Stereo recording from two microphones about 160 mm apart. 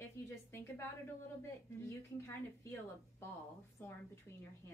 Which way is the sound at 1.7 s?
15° left (ahead or behind).